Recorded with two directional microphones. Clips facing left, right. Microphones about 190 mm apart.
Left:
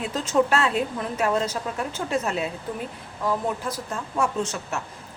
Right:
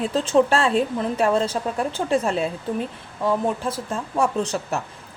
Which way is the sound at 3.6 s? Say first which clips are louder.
Right 4 dB; 30° right (ahead or behind).